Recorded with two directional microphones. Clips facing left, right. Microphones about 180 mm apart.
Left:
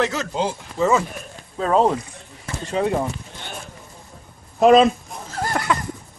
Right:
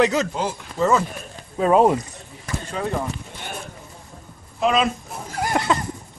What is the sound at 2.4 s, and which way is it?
Speech, 25° left (ahead or behind).